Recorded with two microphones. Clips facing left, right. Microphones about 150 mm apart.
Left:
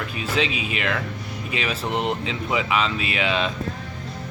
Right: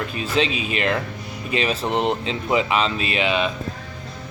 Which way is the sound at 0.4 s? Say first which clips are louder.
Right 3 dB; 30° right (ahead or behind).